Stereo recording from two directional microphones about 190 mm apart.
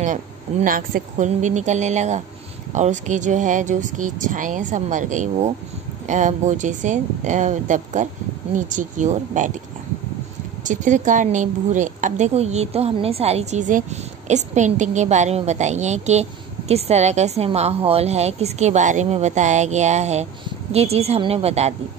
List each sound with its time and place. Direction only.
0.0 s a woman's voice: 40° right (ahead or behind)
10.6 s a woman's voice: 40° right (ahead or behind)